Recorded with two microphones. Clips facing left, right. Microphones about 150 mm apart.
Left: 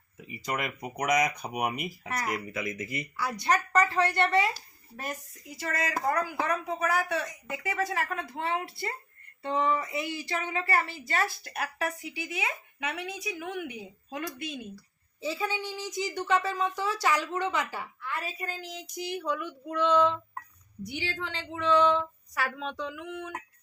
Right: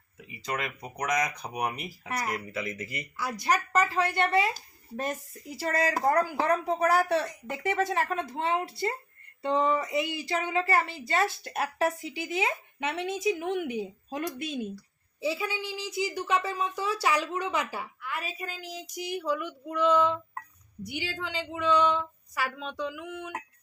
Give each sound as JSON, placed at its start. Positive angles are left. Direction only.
{"t": 0.4, "sound": "speech", "side_deg": 10}
{"t": 3.4, "sound": "a woman's voice", "side_deg": -10}
{"t": 5.5, "sound": "a woman's voice", "side_deg": -35}
{"t": 15.2, "sound": "a woman's voice", "side_deg": -10}